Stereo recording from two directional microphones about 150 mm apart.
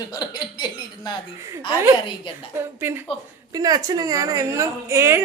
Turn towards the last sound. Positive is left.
turn(degrees=-20)  # may be behind; listen again after turning